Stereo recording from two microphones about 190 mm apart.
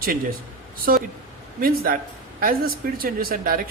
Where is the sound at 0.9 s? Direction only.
50° right (ahead or behind).